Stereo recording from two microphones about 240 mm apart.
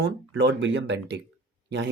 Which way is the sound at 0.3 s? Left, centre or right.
Right.